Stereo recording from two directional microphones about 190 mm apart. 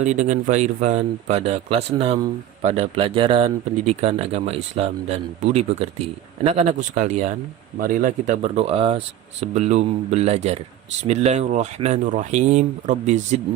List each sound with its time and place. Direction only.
0.0 s speech: 40° right (ahead or behind)